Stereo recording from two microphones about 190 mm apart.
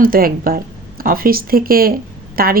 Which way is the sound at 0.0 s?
50° right (ahead or behind).